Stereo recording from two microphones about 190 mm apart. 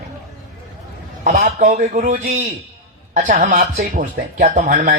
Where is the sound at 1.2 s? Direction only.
40° right (ahead or behind).